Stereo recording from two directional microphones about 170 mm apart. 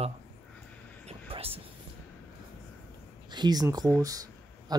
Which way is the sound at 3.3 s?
25° right (ahead or behind).